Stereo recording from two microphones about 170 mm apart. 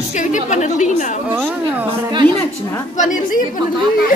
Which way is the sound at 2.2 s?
10° left (ahead or behind).